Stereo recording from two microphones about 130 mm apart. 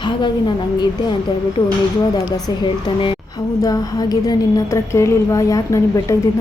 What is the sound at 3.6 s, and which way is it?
A woman's voice, 30° left (ahead or behind).